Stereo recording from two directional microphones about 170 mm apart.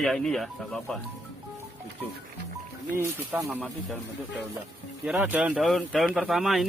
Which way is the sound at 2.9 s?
15° right (ahead or behind).